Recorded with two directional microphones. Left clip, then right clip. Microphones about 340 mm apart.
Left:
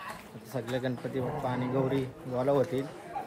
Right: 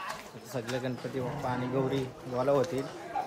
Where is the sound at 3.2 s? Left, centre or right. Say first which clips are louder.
Right 4 dB; right.